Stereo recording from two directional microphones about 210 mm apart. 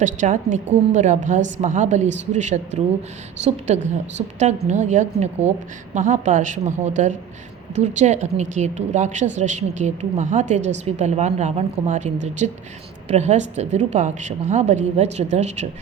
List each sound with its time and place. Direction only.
0.0 s a woman's voice: 35° right (ahead or behind)
3.8 s a woman's voice: 35° right (ahead or behind)